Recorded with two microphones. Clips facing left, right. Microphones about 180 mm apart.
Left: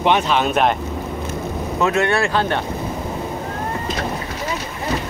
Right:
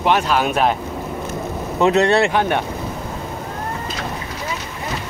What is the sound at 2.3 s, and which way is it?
Speech, 15° right (ahead or behind).